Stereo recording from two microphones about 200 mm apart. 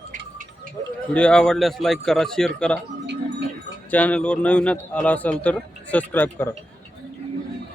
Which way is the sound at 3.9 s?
5° left (ahead or behind).